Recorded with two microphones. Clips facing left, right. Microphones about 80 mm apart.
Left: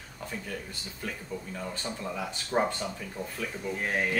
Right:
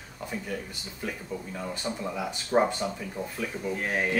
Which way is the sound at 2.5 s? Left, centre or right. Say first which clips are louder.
Right 4 dB; centre.